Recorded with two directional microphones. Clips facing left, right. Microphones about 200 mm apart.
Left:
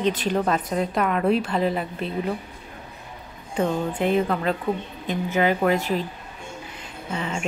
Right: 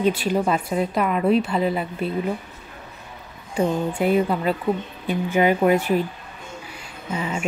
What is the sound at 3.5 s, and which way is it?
Speech, 10° right (ahead or behind).